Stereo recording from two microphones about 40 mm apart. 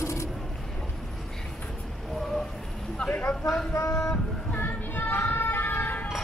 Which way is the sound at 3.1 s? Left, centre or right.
Left.